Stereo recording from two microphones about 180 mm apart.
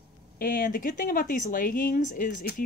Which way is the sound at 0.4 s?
50° left (ahead or behind).